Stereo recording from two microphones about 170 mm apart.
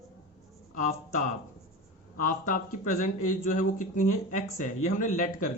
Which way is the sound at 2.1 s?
50° left (ahead or behind).